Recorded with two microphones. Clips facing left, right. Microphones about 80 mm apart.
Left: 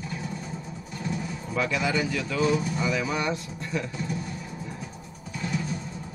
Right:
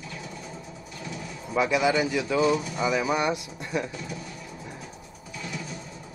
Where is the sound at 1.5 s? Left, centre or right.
Centre.